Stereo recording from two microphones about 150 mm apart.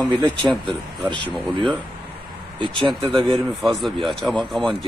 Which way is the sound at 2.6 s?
30° right (ahead or behind).